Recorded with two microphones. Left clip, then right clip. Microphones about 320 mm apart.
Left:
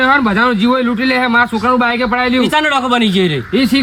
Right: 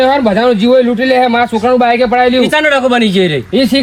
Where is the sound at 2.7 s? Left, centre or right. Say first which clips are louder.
Right 3 dB; centre.